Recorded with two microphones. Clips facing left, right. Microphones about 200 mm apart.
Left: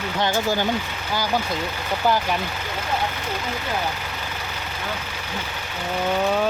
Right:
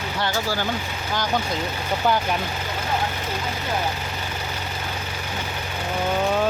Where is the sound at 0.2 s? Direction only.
20° left (ahead or behind).